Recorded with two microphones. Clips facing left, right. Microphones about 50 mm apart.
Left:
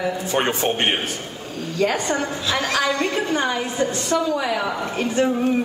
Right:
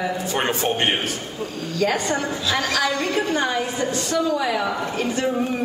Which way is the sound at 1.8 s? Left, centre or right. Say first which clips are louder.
Left 1 dB; left.